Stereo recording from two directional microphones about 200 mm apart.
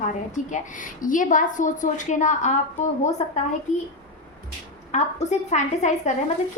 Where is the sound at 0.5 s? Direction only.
40° left (ahead or behind).